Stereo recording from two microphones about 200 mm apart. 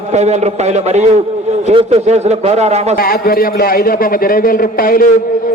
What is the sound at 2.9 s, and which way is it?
A man's voice, 45° left (ahead or behind).